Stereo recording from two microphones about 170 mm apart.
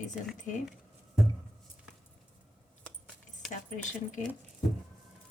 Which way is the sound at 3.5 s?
45° left (ahead or behind).